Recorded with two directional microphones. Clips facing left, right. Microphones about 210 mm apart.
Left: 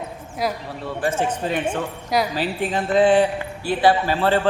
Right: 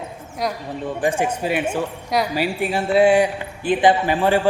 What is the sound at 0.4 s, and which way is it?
Speech, centre (ahead or behind).